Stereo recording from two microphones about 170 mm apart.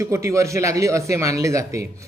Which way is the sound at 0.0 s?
15° right (ahead or behind).